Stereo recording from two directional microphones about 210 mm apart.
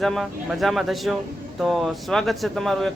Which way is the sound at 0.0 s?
Centre (ahead or behind).